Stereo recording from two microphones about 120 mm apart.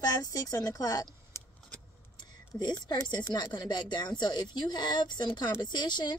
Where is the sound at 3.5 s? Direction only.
35° left (ahead or behind).